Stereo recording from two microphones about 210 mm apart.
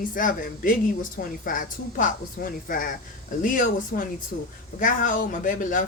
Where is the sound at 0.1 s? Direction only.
40° left (ahead or behind).